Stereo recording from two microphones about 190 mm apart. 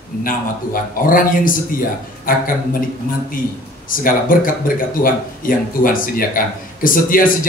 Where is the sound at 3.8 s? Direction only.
45° left (ahead or behind).